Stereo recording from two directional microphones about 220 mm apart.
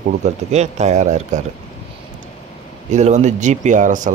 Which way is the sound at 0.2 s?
30° right (ahead or behind).